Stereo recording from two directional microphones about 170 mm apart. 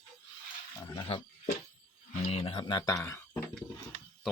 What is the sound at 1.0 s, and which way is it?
Speech, 35° left (ahead or behind).